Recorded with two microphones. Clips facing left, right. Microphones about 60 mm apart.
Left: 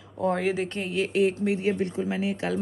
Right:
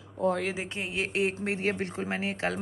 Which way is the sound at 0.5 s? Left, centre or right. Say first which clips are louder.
Left 5 dB; centre.